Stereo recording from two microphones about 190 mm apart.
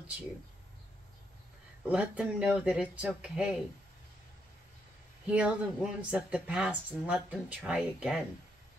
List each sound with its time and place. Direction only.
1.9 s speech: 5° right (ahead or behind)
5.2 s speech: 5° right (ahead or behind)